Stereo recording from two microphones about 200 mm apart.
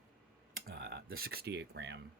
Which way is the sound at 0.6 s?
55° right (ahead or behind).